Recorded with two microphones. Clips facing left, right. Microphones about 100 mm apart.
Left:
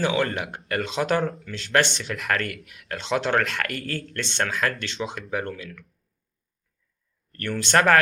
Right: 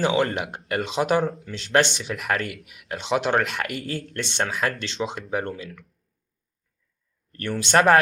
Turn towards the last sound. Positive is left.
turn(degrees=-20)  # may be behind; listen again after turning